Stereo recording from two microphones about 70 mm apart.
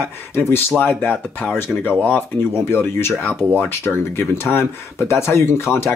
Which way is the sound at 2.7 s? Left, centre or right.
Left.